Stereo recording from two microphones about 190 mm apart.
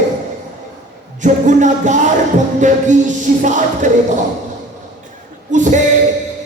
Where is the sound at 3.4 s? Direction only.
40° right (ahead or behind).